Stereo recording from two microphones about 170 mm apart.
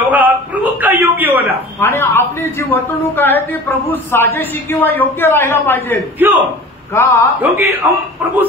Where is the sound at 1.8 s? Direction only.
15° left (ahead or behind).